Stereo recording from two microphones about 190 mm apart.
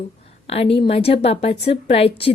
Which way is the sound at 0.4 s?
30° left (ahead or behind).